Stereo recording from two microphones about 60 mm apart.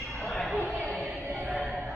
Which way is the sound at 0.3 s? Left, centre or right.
Centre.